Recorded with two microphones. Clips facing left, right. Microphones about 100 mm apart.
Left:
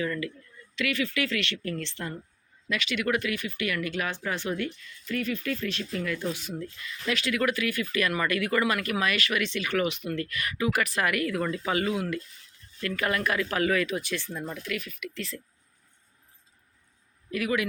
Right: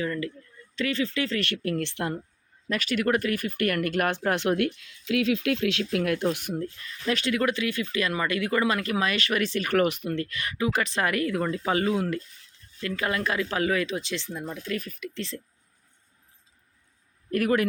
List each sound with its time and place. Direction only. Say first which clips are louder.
0.0 s speech: right 1 dB; 30° right (ahead or behind)
1.4 s speech: right 4 dB; 55° right (ahead or behind)
2.6 s speech: right 3 dB; 40° right (ahead or behind); by 5.8 s 85° right
5.9 s speech: right 4 dB; 65° right (ahead or behind)
7.1 s speech: right 2 dB; 30° right (ahead or behind)
10.1 s speech: right 1 dB; 25° right (ahead or behind)
12.8 s speech: even; 20° right (ahead or behind)
14.6 s speech: right 2 dB; 35° right (ahead or behind)
17.3 s speech: right 4 dB; 45° right (ahead or behind)